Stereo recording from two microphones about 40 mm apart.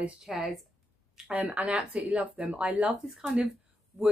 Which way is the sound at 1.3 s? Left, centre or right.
Right.